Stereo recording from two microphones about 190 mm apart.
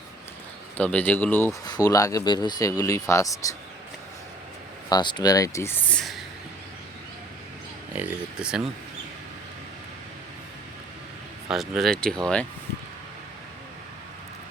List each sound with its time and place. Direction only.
0.8 s speech: 10° left (ahead or behind)
4.9 s speech: 25° left (ahead or behind); by 6.2 s centre (ahead or behind)
7.9 s speech: 5° right (ahead or behind)
11.5 s speech: centre (ahead or behind)